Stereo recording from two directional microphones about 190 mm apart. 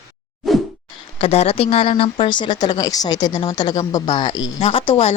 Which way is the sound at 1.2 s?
35° left (ahead or behind).